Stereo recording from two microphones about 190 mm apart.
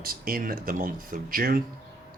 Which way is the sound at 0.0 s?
50° right (ahead or behind).